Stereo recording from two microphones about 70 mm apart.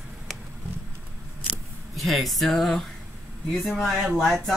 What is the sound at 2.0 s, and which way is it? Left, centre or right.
Speech, centre.